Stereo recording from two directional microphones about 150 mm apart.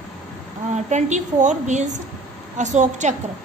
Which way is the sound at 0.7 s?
50° right (ahead or behind).